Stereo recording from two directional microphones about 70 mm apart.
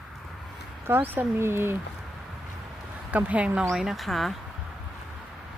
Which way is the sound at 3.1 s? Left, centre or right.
Right.